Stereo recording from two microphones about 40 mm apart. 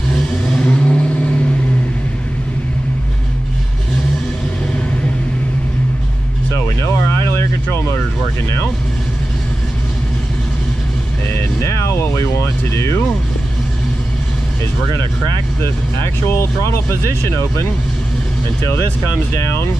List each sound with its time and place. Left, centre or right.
0.5 s vehicle: left
11.9 s a sound: left
15.6 s speech: left